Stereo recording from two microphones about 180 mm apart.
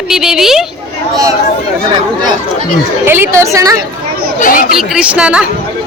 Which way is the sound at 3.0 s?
15° right (ahead or behind).